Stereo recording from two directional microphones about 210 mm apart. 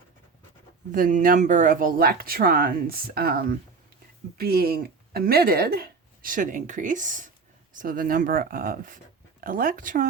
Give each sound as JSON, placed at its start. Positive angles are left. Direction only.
{"t": 0.9, "sound": "speech", "side_deg": -40}